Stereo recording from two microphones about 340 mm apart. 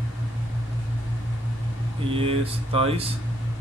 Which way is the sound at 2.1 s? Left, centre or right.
Centre.